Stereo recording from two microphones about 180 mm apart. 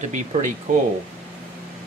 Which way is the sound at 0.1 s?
45° right (ahead or behind).